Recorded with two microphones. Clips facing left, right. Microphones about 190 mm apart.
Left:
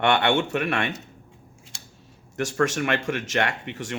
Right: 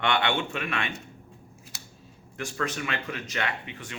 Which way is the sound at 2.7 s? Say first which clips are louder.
Left 8 dB; 75° left (ahead or behind).